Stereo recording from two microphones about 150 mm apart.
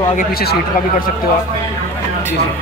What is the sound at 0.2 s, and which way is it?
Speech, 90° left.